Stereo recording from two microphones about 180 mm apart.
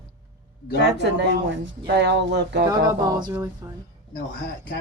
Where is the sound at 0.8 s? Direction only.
70° right (ahead or behind).